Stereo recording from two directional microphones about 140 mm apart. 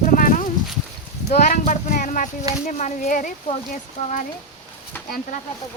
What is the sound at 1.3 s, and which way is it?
Speech, 60° left (ahead or behind).